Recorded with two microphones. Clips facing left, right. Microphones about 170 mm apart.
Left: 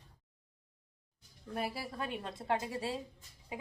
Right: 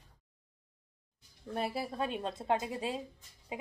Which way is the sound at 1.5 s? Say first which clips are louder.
Right 3 dB; 25° right (ahead or behind).